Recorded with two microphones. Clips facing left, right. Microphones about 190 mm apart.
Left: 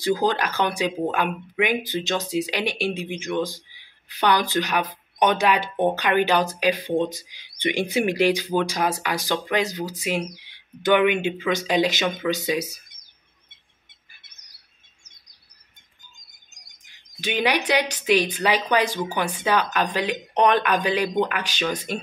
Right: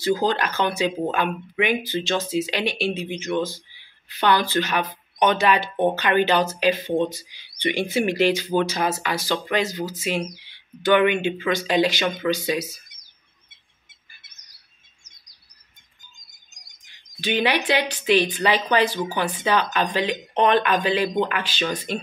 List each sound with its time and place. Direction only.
0.0 s speech: 15° left (ahead or behind)
17.2 s speech: 10° left (ahead or behind)